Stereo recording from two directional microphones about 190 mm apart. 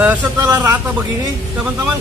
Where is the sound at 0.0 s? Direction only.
15° right (ahead or behind).